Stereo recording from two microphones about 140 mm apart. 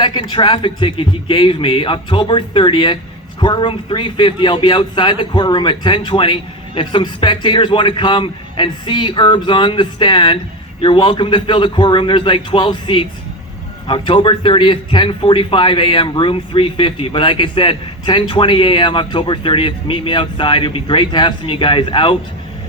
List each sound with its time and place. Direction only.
0.0 s a man's voice: 35° left (ahead or behind)